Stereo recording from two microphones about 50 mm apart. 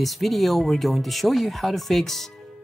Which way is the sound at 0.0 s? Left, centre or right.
Centre.